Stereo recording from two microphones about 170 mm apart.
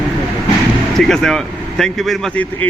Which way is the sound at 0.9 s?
5° left (ahead or behind).